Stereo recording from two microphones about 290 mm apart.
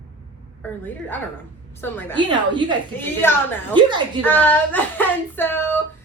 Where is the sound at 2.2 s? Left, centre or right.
Centre.